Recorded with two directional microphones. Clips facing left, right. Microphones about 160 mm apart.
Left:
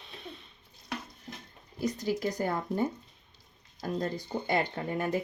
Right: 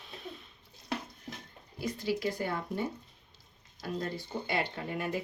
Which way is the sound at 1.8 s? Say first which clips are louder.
Left 2 dB; 45° left (ahead or behind).